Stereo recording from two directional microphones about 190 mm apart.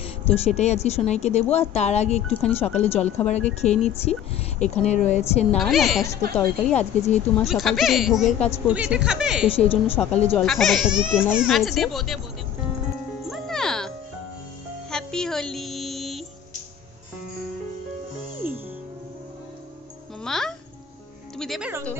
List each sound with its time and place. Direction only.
0.0 s speech: 35° left (ahead or behind)
5.6 s a child's voice: centre (ahead or behind)
6.7 s speech: 35° left (ahead or behind)
7.3 s a child's voice: centre (ahead or behind)
9.6 s a woman's voice: 30° left (ahead or behind)
9.9 s a woman's voice: 10° left (ahead or behind)
13.3 s music: centre (ahead or behind)
20.2 s music: centre (ahead or behind)